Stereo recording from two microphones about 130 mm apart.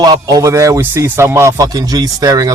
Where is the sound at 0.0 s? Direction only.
30° right (ahead or behind).